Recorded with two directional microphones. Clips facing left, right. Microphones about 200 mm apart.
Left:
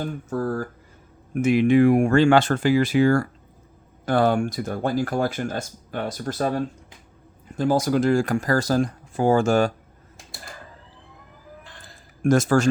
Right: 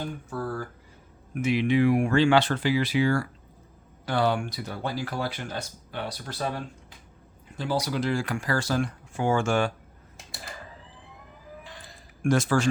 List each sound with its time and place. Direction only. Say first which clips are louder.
0.3 s speech: left 9 dB; 45° left (ahead or behind)
10.2 s a sound: even; centre (ahead or behind)
12.2 s speech: left 5 dB; 45° left (ahead or behind)